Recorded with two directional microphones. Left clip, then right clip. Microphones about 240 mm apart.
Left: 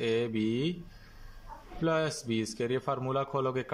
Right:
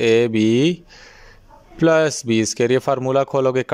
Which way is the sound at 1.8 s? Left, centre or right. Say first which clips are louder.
Right 15 dB; right.